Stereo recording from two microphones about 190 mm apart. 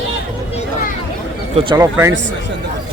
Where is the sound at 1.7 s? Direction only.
15° right (ahead or behind).